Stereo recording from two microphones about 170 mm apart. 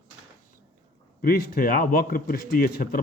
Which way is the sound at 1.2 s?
65° left (ahead or behind).